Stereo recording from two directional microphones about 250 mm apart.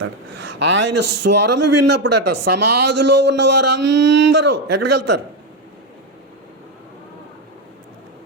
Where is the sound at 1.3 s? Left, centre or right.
Right.